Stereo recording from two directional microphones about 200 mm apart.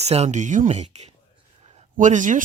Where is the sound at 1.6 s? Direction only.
35° right (ahead or behind).